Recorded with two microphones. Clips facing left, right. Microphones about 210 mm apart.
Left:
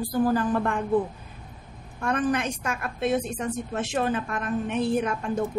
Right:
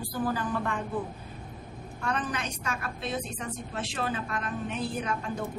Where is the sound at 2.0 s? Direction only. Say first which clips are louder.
Left 7 dB; 50° left (ahead or behind).